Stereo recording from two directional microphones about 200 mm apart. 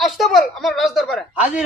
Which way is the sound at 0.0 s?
Centre (ahead or behind).